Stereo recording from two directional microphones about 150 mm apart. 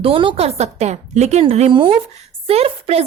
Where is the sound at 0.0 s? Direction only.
35° right (ahead or behind).